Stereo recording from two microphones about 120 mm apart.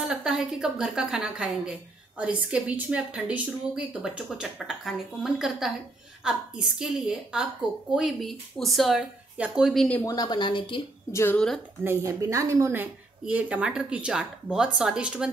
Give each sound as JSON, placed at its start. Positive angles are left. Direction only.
{"t": 0.1, "sound": "a woman's voice", "side_deg": -5}
{"t": 10.0, "sound": "speech", "side_deg": 35}
{"t": 11.1, "sound": "a woman's voice", "side_deg": 20}
{"t": 11.3, "sound": "a woman's voice", "side_deg": 5}
{"t": 11.8, "sound": "a woman's voice", "side_deg": -20}
{"t": 13.2, "sound": "a woman's voice", "side_deg": -10}